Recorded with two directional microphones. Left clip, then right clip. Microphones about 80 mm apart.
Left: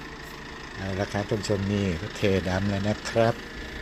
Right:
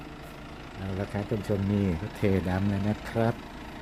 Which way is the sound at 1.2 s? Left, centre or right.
Centre.